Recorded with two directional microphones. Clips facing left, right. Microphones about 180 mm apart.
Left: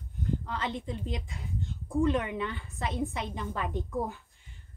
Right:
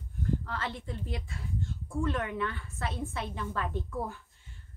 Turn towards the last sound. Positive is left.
turn(degrees=15)  # may be behind; listen again after turning